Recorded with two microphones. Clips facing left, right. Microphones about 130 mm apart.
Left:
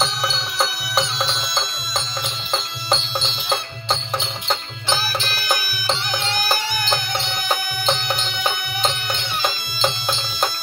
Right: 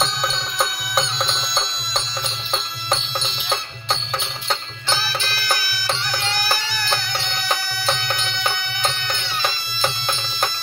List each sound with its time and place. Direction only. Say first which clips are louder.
0.0 s music: even; 5° left (ahead or behind)
4.5 s music: left 1 dB; 15° left (ahead or behind)
7.8 s music: left 1 dB; 10° left (ahead or behind)